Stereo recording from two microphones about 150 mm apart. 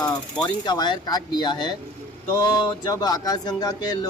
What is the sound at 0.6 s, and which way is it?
Speech, 30° left (ahead or behind).